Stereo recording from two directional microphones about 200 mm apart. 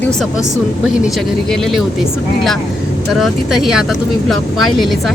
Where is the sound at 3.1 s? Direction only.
Centre (ahead or behind).